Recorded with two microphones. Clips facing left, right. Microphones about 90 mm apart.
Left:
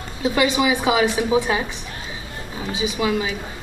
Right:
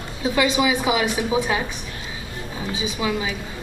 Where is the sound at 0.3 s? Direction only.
25° left (ahead or behind).